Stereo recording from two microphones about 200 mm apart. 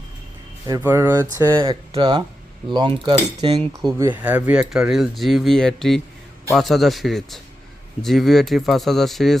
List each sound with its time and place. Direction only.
0.7 s speech: 15° right (ahead or behind)
1.5 s speech: 25° right (ahead or behind)
3.9 s speech: 15° right (ahead or behind)